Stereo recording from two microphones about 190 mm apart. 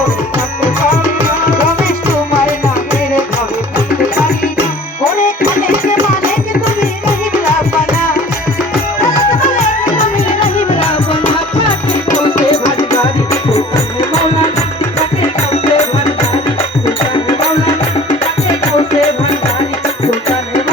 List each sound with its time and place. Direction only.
10.6 s music: 35° left (ahead or behind)
12.2 s music: 20° left (ahead or behind)
15.6 s music: 35° left (ahead or behind)